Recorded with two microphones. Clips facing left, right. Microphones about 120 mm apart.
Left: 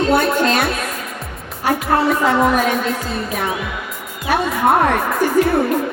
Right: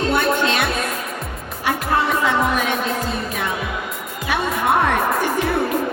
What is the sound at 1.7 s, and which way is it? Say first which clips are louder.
A woman's voice: left 4 dB; 40° left (ahead or behind).